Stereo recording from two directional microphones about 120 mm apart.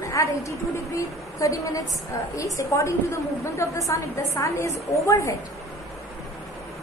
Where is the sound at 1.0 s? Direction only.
25° left (ahead or behind).